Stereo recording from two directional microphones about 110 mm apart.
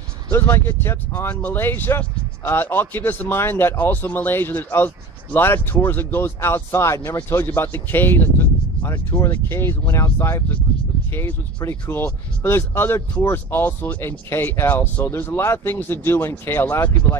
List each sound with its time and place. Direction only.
0.3 s speech: 20° left (ahead or behind)